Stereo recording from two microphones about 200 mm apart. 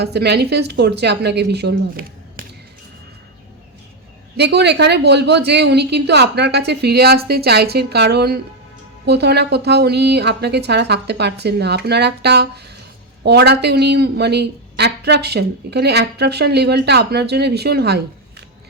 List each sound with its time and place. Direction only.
0.0 s speech: 55° right (ahead or behind)
4.4 s speech: 55° right (ahead or behind)